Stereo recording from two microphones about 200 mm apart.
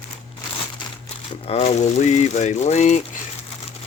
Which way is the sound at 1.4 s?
35° left (ahead or behind).